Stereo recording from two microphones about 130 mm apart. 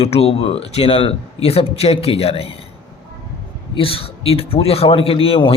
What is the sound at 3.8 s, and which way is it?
Speech, 45° left (ahead or behind).